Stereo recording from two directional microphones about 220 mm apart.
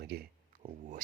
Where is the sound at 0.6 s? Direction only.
25° right (ahead or behind).